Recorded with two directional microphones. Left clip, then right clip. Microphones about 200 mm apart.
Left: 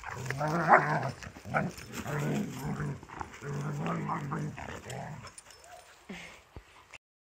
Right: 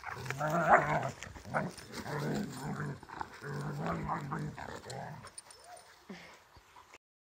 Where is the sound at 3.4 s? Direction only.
10° left (ahead or behind).